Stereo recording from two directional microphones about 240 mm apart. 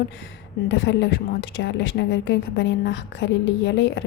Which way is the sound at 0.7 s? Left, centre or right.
Left.